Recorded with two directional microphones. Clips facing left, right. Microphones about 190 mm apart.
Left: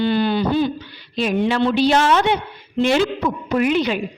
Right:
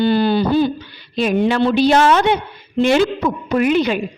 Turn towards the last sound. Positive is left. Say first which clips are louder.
# right 2 dB
turn(degrees=-50)  # may be behind; listen again after turning